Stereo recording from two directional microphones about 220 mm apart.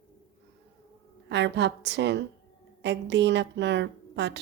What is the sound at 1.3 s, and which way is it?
Speech, 55° right (ahead or behind).